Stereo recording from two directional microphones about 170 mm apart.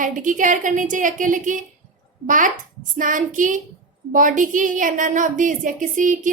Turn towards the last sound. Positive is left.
turn(degrees=-50)  # may be behind; listen again after turning